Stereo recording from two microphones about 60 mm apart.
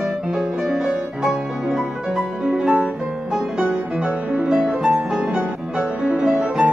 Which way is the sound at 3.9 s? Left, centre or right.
Centre.